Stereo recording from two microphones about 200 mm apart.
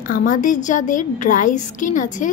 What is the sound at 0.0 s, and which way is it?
A woman's voice, 45° left (ahead or behind).